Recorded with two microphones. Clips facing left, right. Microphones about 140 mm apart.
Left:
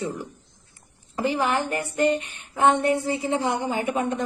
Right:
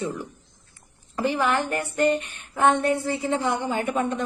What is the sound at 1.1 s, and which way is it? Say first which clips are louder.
A woman's voice: even; 15° left (ahead or behind).